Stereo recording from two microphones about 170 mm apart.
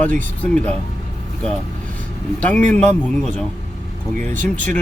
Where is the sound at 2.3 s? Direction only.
10° left (ahead or behind).